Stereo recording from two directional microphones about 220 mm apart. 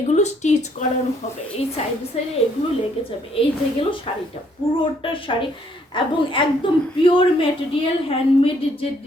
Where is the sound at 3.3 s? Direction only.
25° left (ahead or behind).